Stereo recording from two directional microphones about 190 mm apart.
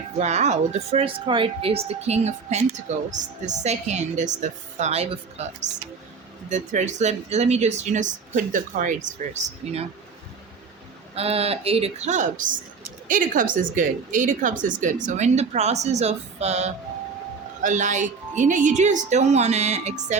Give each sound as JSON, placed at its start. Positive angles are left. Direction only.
{"t": 0.2, "sound": "speech", "side_deg": -35}
{"t": 11.1, "sound": "a woman's voice", "side_deg": -30}